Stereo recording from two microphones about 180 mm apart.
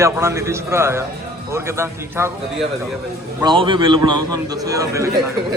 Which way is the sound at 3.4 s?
25° right (ahead or behind).